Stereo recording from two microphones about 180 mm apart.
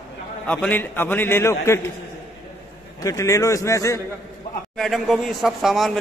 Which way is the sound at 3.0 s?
20° left (ahead or behind).